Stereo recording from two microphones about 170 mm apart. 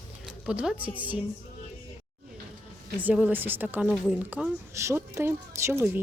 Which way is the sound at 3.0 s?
10° right (ahead or behind).